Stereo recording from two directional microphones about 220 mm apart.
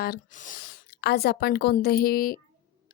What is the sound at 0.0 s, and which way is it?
Speech, 40° left (ahead or behind).